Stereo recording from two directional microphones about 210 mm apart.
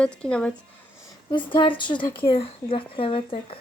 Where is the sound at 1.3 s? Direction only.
25° left (ahead or behind).